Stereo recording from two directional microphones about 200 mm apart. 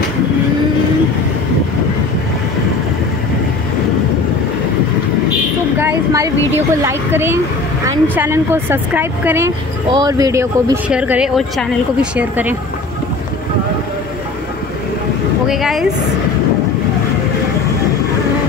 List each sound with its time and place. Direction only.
5.8 s a woman's voice: 15° right (ahead or behind)
15.4 s speech: centre (ahead or behind)